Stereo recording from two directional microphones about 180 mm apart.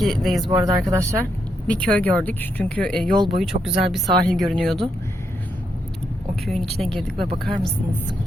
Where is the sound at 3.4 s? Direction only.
Centre (ahead or behind).